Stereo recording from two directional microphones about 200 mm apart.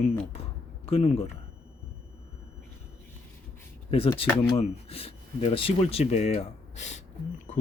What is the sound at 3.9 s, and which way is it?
Speech, 30° left (ahead or behind).